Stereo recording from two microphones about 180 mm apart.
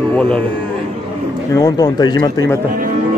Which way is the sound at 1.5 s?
20° left (ahead or behind).